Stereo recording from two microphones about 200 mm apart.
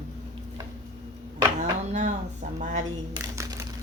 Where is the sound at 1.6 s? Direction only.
35° right (ahead or behind).